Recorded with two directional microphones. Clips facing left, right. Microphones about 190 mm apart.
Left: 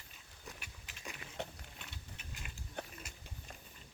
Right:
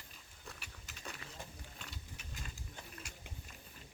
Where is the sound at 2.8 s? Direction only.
65° left (ahead or behind).